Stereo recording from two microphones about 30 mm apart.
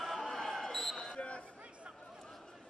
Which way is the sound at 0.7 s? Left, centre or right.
Centre.